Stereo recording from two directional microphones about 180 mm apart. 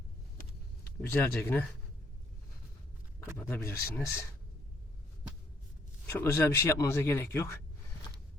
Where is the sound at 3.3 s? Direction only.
15° left (ahead or behind).